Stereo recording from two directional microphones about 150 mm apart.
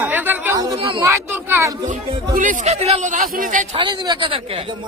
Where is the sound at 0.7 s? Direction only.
35° right (ahead or behind).